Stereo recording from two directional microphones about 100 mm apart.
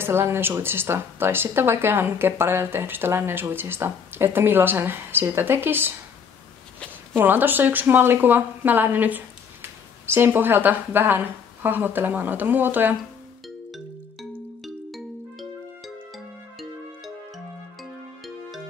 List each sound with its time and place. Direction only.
0.0 s speech: 25° right (ahead or behind)
7.2 s speech: 20° right (ahead or behind)
14.6 s music: centre (ahead or behind)